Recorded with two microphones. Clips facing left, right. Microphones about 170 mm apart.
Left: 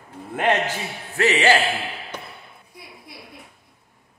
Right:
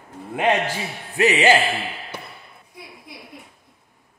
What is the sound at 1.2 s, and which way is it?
Music, 20° right (ahead or behind).